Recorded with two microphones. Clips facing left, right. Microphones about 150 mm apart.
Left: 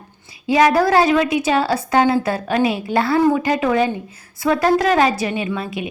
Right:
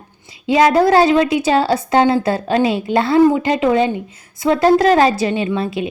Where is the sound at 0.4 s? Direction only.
25° right (ahead or behind).